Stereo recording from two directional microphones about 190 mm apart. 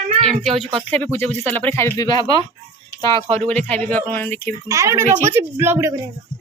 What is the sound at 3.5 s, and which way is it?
Speech, 5° left (ahead or behind).